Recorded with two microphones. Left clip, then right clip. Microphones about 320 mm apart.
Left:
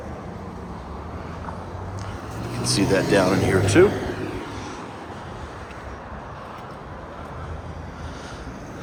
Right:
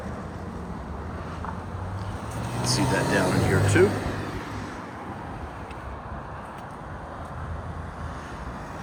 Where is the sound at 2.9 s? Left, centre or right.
Centre.